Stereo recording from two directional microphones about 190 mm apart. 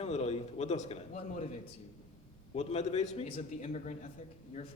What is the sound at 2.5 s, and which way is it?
A man's voice, 35° left (ahead or behind).